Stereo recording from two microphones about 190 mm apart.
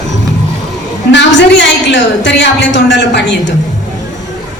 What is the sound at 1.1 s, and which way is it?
A woman's voice, 65° left (ahead or behind).